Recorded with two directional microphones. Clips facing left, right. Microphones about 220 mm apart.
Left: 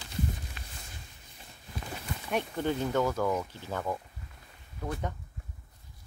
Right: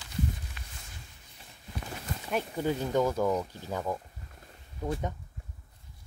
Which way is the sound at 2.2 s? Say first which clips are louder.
Even; 5° right (ahead or behind).